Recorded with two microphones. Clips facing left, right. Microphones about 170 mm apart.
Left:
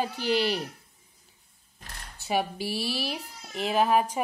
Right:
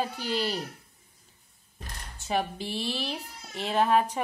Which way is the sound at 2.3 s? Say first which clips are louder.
Left 1 dB; 10° left (ahead or behind).